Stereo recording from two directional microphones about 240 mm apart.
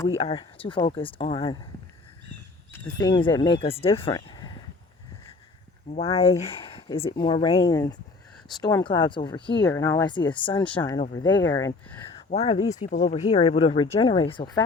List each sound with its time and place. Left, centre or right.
0.2 s speech: left
2.8 s speech: centre
5.9 s speech: left
12.3 s speech: left
12.6 s speech: centre
12.9 s speech: left